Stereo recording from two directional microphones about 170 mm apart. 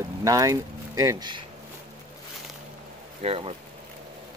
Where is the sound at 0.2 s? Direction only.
20° right (ahead or behind).